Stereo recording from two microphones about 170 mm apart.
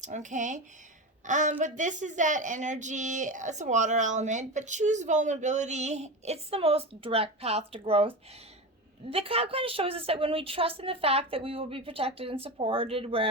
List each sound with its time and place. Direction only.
0.0 s a woman's voice: 45° right (ahead or behind)